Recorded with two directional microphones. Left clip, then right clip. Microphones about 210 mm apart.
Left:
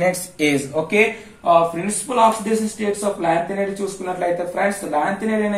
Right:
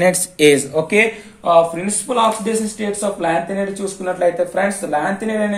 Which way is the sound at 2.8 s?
45° right (ahead or behind).